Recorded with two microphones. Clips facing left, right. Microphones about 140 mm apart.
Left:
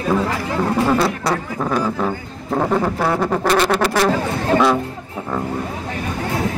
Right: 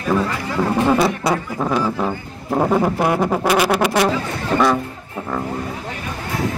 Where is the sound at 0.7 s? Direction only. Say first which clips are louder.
Right 1 dB; 15° right (ahead or behind).